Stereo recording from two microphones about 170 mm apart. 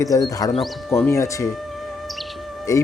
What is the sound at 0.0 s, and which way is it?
Speech, 20° left (ahead or behind).